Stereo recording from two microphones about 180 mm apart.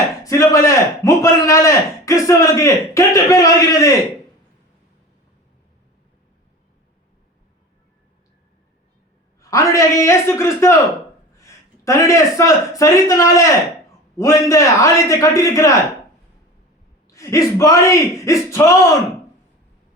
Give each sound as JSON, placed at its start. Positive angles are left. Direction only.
{"t": 0.2, "sound": "a man's voice", "side_deg": 15}
{"t": 9.4, "sound": "a sound", "side_deg": 20}
{"t": 9.7, "sound": "speech", "side_deg": 15}
{"t": 17.2, "sound": "speech", "side_deg": 15}